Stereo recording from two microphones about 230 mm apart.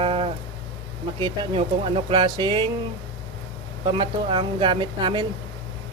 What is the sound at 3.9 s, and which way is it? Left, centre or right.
Speech, centre.